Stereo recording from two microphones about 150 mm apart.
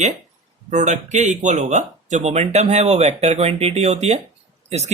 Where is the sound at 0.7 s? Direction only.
50° right (ahead or behind).